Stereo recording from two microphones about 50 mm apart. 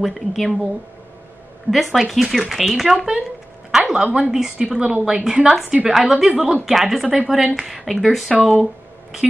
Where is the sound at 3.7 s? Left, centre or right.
Centre.